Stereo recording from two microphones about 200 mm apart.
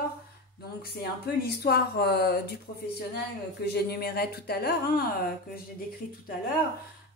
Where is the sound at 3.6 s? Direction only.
55° left (ahead or behind).